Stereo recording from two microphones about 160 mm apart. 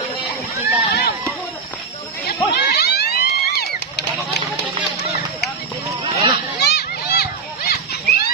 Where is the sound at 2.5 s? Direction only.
80° left.